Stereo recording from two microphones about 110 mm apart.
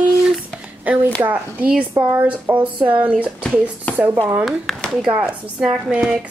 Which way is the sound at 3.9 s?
15° left (ahead or behind).